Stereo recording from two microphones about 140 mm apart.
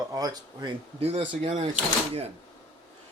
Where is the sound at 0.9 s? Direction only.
45° right (ahead or behind).